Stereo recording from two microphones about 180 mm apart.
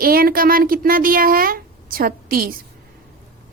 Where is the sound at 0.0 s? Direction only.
55° right (ahead or behind).